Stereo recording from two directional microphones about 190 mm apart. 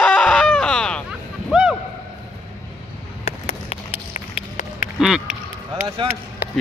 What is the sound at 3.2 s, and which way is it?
Run, 35° left (ahead or behind).